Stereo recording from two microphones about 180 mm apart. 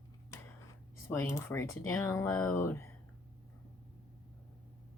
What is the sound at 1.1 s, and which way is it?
Speech, 15° left (ahead or behind).